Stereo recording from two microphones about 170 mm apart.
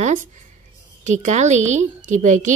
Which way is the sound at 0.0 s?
50° right (ahead or behind).